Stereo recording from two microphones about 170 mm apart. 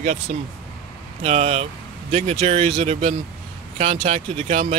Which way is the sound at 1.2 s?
35° right (ahead or behind).